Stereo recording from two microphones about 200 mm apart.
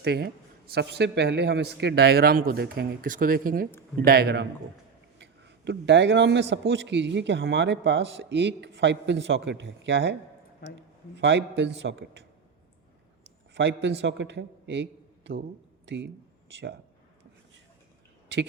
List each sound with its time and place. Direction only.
0.0 s a man's voice: 55° right (ahead or behind)
13.5 s a man's voice: 60° right (ahead or behind)